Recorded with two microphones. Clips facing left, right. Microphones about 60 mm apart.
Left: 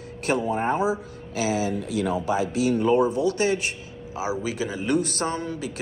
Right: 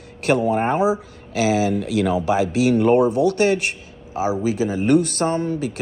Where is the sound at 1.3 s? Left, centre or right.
Right.